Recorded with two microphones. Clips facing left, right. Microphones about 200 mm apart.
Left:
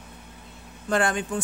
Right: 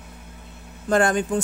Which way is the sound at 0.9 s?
45° right (ahead or behind).